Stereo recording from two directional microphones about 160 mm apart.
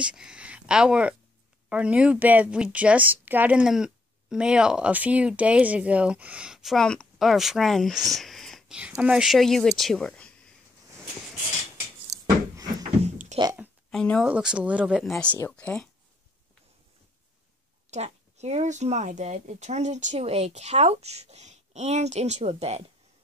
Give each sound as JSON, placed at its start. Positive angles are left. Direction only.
{"t": 0.0, "sound": "speech", "side_deg": -5}
{"t": 13.0, "sound": "a sound", "side_deg": -45}
{"t": 13.8, "sound": "speech", "side_deg": 5}
{"t": 14.2, "sound": "speech", "side_deg": -5}
{"t": 17.9, "sound": "speech", "side_deg": -45}